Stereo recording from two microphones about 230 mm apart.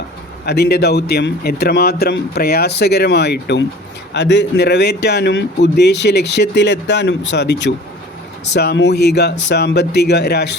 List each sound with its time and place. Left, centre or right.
0.4 s speech: left